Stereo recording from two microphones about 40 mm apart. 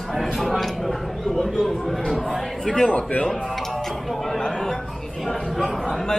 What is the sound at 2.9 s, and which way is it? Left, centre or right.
Speech, left.